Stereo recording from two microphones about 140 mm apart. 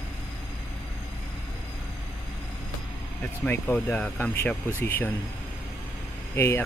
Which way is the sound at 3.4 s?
10° left (ahead or behind).